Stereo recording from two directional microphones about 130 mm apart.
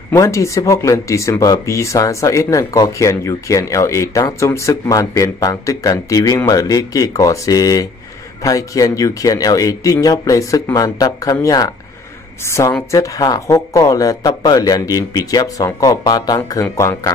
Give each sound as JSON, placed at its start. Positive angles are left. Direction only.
{"t": 0.1, "sound": "speech", "side_deg": 25}